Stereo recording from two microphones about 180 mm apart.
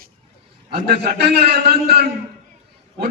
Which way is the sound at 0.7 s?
65° right (ahead or behind).